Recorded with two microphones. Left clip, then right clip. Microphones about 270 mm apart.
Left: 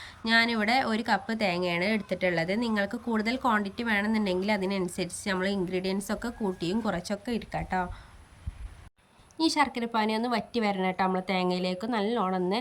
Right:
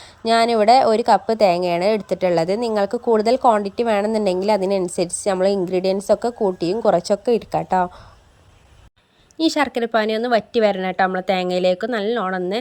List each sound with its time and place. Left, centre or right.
0.0 s a woman's voice: centre
7.6 s speech: right
9.4 s a woman's voice: centre